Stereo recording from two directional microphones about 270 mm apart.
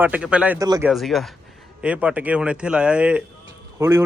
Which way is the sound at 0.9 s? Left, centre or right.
Centre.